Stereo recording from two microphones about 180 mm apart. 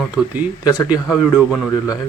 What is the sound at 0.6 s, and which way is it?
Speech, 20° left (ahead or behind).